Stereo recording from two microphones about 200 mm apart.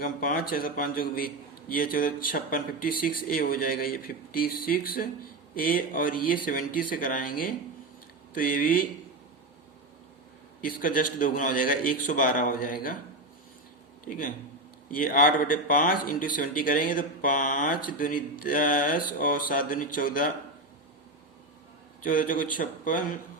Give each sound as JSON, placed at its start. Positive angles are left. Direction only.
{"t": 0.2, "sound": "speech", "side_deg": 45}
{"t": 10.6, "sound": "speech", "side_deg": 45}
{"t": 14.8, "sound": "speech", "side_deg": 45}
{"t": 22.0, "sound": "speech", "side_deg": 45}